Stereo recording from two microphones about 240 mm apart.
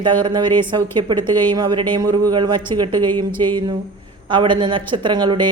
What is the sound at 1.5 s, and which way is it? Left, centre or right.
A woman's voice, centre.